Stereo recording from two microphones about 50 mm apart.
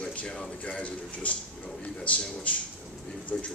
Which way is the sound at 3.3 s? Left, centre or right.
Centre.